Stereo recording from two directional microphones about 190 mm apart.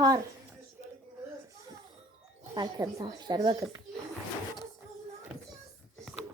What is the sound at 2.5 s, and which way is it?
A child's voice, 20° right (ahead or behind).